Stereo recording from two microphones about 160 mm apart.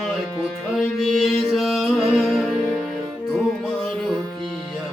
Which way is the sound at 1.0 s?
Centre (ahead or behind).